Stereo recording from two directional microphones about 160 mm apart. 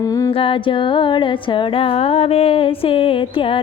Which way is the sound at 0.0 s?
20° left (ahead or behind).